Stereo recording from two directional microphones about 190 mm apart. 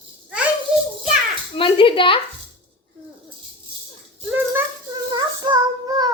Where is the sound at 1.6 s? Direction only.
25° left (ahead or behind).